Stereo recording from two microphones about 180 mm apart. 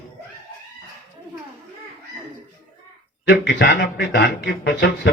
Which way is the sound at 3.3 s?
60° left (ahead or behind).